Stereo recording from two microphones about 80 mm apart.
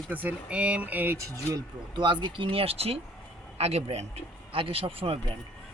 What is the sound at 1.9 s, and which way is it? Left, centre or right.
Speech, right.